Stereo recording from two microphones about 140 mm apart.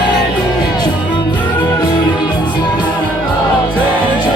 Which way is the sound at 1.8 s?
30° left (ahead or behind).